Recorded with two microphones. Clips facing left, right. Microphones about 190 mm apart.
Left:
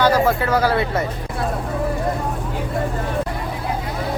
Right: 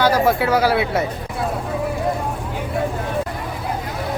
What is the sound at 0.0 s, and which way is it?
Speech, 10° right (ahead or behind).